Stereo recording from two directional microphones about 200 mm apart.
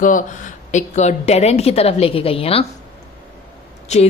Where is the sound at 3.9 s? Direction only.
35° left (ahead or behind).